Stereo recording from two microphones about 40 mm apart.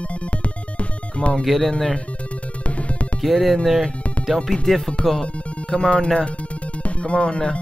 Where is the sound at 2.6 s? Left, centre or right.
Left.